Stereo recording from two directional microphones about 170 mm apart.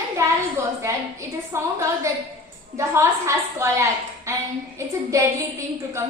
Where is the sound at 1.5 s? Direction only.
15° right (ahead or behind).